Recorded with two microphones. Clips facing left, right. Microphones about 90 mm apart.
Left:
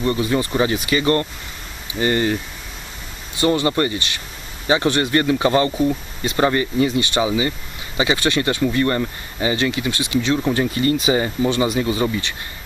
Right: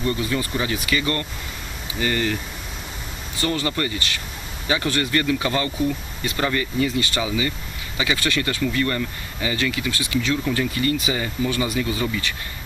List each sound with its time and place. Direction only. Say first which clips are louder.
0.0 s speech: left 4 dB; 30° left (ahead or behind)
3.3 s speech: left 6 dB; 20° left (ahead or behind)